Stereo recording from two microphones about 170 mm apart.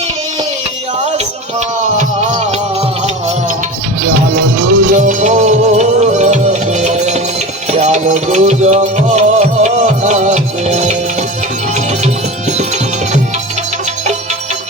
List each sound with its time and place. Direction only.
1.2 s music: 45° right (ahead or behind)
4.0 s music: 55° right (ahead or behind)
12.5 s music: 40° right (ahead or behind)